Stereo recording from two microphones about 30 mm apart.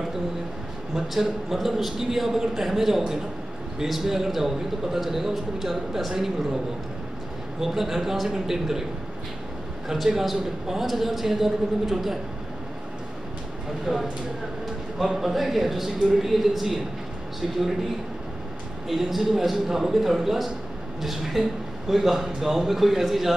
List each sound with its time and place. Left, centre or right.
0.9 s a man's voice: centre
7.6 s a man's voice: centre
10.3 s a man's voice: centre
13.9 s speech: right
15.1 s a man's voice: centre
18.9 s a man's voice: centre